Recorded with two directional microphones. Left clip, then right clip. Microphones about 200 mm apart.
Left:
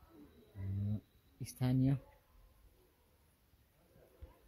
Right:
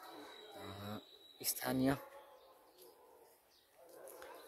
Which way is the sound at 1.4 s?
15° right (ahead or behind).